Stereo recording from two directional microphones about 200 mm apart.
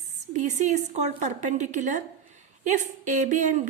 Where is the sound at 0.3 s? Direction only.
35° right (ahead or behind).